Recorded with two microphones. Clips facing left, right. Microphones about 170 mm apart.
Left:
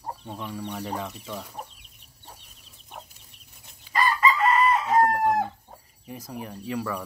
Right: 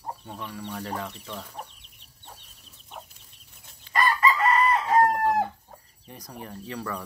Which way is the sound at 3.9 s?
10° left (ahead or behind).